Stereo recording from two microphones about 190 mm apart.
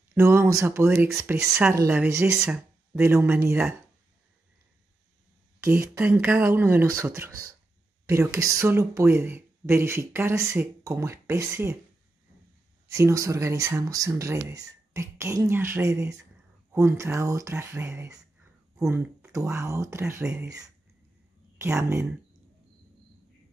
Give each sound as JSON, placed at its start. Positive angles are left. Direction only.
{"t": 0.1, "sound": "speech", "side_deg": -15}
{"t": 5.6, "sound": "speech", "side_deg": -10}
{"t": 12.8, "sound": "speech", "side_deg": -15}